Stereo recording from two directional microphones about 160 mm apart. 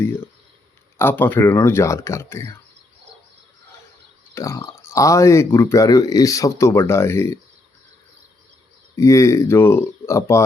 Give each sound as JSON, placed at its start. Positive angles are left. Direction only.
{"t": 0.9, "sound": "speech", "side_deg": 15}
{"t": 4.4, "sound": "speech", "side_deg": 15}
{"t": 9.0, "sound": "speech", "side_deg": 20}